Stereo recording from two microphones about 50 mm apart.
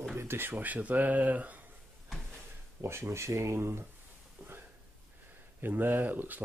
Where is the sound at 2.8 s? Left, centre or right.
Right.